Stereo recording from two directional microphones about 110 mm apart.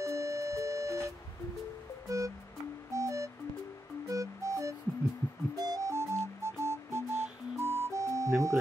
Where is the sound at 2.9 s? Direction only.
30° right (ahead or behind).